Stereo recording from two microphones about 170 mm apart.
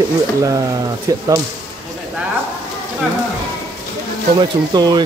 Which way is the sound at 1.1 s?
20° right (ahead or behind).